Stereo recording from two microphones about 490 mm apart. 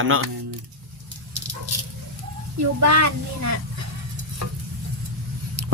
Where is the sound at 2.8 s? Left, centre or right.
Right.